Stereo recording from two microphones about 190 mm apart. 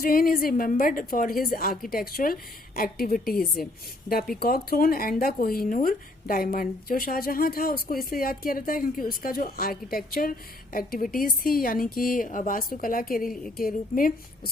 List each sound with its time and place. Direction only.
0.0 s speech: 50° left (ahead or behind)